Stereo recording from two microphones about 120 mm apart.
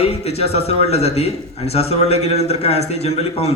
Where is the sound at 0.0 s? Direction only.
60° left (ahead or behind).